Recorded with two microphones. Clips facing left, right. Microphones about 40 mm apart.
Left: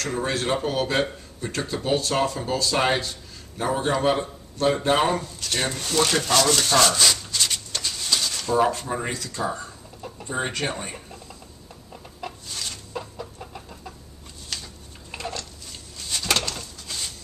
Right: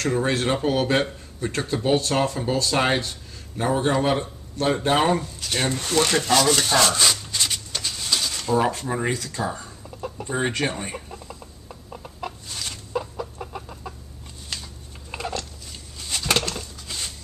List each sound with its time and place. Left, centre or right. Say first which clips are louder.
0.1 s speech: right 1 dB; centre
5.9 s speech: right 1 dB; centre
6.2 s speech: right 1 dB; centre
7.2 s shuffling cards: even; centre
9.8 s chicken: right 5 dB; right
10.1 s speech: right 2 dB; centre
12.2 s chicken: right 1 dB; centre
14.5 s a sound: even; centre
16.5 s bird: right 1 dB; centre